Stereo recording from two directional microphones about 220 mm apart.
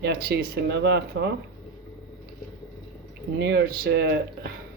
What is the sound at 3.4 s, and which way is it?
Speech, 50° right (ahead or behind).